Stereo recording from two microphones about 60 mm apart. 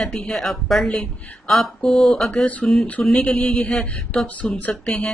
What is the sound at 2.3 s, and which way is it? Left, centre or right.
A woman's voice, centre.